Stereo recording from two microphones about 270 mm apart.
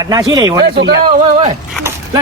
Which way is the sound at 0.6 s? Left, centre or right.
Right.